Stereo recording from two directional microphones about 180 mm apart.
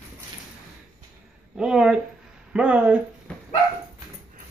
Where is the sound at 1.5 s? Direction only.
5° right (ahead or behind).